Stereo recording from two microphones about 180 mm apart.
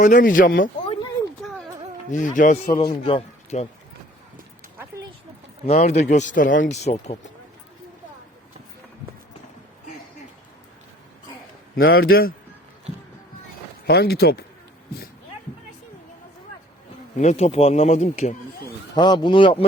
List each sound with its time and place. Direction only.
0.0 s speech: 45° left (ahead or behind)
2.0 s speech: 45° left (ahead or behind)
2.7 s a man's voice: 30° left (ahead or behind)
5.6 s speech: 35° left (ahead or behind)
6.7 s speech: 35° left (ahead or behind)
11.8 s speech: 60° left (ahead or behind)
13.8 s speech: 60° left (ahead or behind)
17.2 s speech: 40° left (ahead or behind)
18.9 s a man's voice: 25° left (ahead or behind)